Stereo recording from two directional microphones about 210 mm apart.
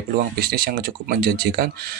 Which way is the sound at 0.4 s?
45° right (ahead or behind).